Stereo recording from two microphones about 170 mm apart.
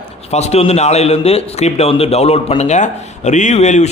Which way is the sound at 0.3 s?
40° left (ahead or behind).